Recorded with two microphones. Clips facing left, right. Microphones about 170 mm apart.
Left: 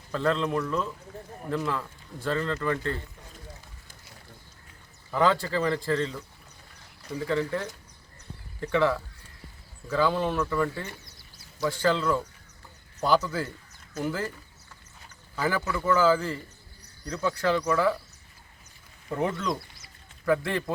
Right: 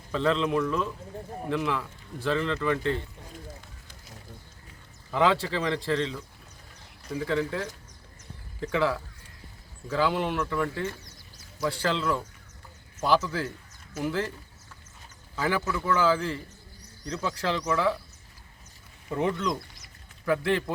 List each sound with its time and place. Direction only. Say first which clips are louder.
0.1 s a man's voice: right 1 dB; centre (ahead or behind)
5.1 s a man's voice: even; centre (ahead or behind)
7.3 s a man's voice: left 1 dB; centre (ahead or behind)
8.7 s a man's voice: left 2 dB; centre (ahead or behind)
15.4 s a man's voice: even; centre (ahead or behind)
19.1 s a man's voice: right 1 dB; centre (ahead or behind)